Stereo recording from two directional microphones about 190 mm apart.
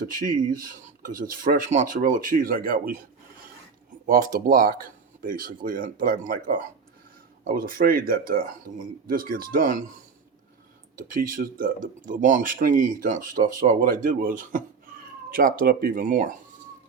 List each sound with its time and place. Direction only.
0.1 s speech: 45° right (ahead or behind)
4.0 s speech: 45° right (ahead or behind)
10.9 s speech: 45° right (ahead or behind)